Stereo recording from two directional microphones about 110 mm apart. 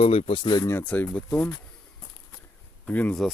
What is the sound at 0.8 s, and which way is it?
Speech, 15° left (ahead or behind).